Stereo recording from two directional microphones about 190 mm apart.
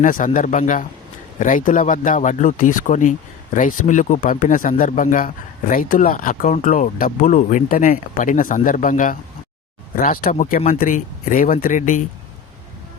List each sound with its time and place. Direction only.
0.0 s speech: 45° left (ahead or behind)